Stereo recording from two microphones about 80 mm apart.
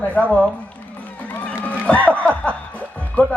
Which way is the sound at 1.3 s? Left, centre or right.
Centre.